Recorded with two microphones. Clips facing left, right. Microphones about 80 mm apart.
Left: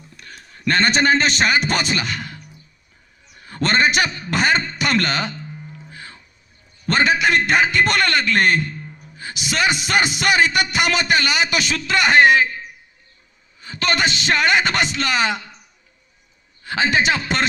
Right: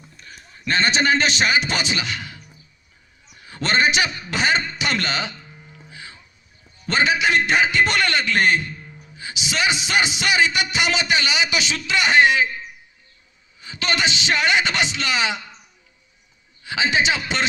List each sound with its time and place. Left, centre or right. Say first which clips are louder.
0.2 s a man's voice: left 3 dB; left
3.3 s a sound: left 2 dB; left
6.8 s music: left 2 dB; left
13.6 s music: left 3 dB; left
16.6 s music: left 2 dB; left